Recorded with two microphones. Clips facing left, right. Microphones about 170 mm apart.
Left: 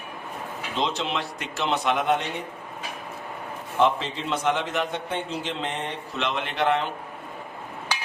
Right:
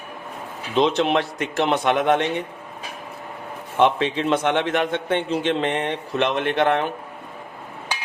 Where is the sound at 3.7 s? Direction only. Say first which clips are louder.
Right 4 dB; 65° right (ahead or behind).